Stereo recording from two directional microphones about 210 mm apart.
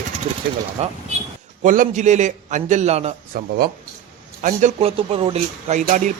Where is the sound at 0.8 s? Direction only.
30° right (ahead or behind).